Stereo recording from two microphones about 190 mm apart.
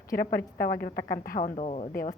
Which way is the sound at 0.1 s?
50° left (ahead or behind).